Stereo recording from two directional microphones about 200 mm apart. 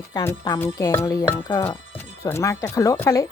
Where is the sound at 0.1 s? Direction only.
15° left (ahead or behind).